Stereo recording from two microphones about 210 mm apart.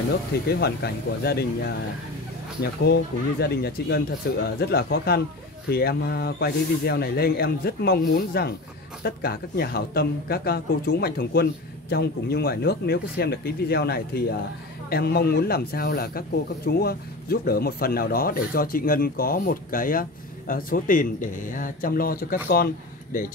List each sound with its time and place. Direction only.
0.3 s speech: 50° left (ahead or behind)